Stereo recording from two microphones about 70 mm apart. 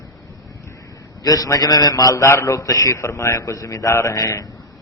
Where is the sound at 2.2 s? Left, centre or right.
Left.